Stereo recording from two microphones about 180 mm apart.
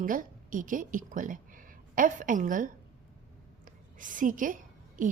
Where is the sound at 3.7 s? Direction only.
45° right (ahead or behind).